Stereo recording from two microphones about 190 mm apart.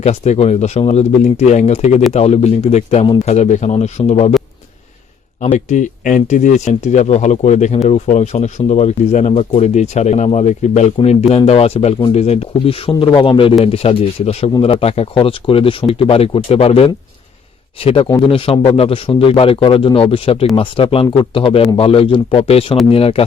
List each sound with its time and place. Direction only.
0.0 s speech: 35° left (ahead or behind)
5.4 s speech: 40° left (ahead or behind)